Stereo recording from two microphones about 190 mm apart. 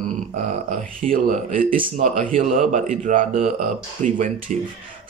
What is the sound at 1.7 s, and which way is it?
Speech, 25° right (ahead or behind).